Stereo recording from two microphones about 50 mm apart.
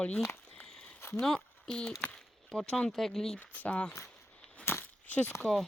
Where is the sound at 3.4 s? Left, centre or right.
Left.